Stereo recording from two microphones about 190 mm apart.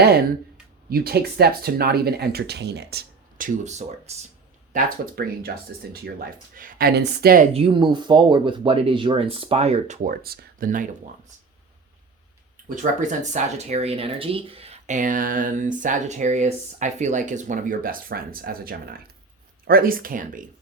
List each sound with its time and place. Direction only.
0.9 s speech: 55° right (ahead or behind); by 4.3 s 35° right (ahead or behind)
4.7 s speech: 50° right (ahead or behind)
7.5 s speech: 25° right (ahead or behind)
10.2 s speech: 50° right (ahead or behind)
12.6 s speech: 40° right (ahead or behind)